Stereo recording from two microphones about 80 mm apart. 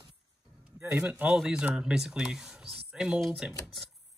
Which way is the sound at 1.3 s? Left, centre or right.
Centre.